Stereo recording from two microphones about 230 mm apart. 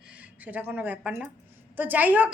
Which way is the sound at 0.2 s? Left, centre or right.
Centre.